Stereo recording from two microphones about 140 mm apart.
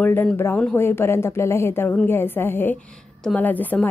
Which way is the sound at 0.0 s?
15° left (ahead or behind).